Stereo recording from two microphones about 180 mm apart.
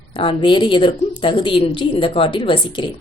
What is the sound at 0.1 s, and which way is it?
A woman's voice, 30° left (ahead or behind).